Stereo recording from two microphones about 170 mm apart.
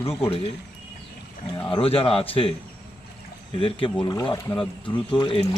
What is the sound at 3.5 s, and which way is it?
Speech, 30° left (ahead or behind).